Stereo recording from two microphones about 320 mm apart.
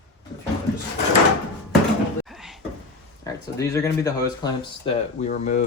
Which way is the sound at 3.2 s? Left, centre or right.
Centre.